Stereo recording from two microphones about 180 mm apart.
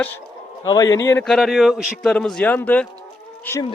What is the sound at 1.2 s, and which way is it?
A man's voice, centre (ahead or behind).